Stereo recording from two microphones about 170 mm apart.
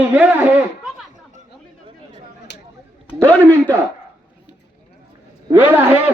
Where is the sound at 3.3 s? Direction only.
10° left (ahead or behind).